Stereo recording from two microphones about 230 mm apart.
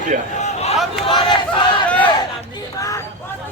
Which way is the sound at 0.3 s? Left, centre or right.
Left.